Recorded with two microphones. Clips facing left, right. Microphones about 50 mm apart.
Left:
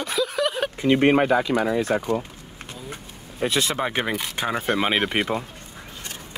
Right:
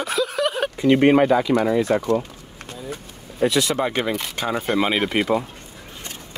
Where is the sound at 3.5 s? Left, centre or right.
Left.